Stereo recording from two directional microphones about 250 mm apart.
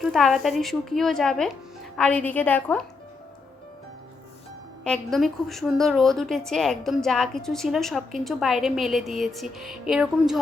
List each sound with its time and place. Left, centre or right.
0.0 s a woman's voice: centre
4.8 s a woman's voice: centre